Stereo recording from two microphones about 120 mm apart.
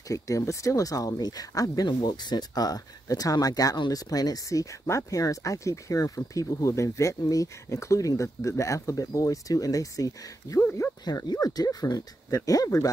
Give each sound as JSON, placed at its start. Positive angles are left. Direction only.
{"t": 0.1, "sound": "speech", "side_deg": 25}